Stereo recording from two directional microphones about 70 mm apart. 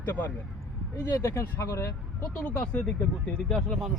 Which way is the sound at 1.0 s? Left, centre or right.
Left.